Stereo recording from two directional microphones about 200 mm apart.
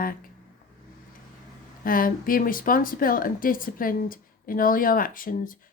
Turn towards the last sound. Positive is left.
turn(degrees=45)  # may be behind; listen again after turning